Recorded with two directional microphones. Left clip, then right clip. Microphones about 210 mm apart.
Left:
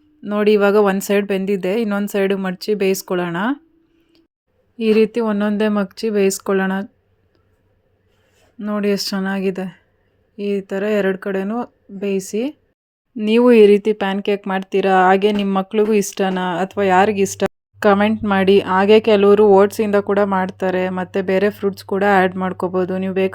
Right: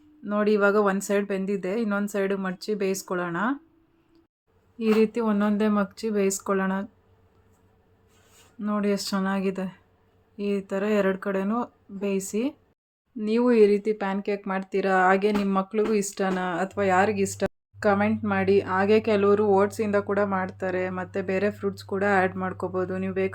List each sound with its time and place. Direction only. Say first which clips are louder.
0.2 s speech: left 8 dB; 35° left (ahead or behind)
4.8 s speech: left 8 dB; 30° left (ahead or behind)
8.5 s speech: left 7 dB; 30° left (ahead or behind)
13.1 s speech: left 9 dB; 35° left (ahead or behind)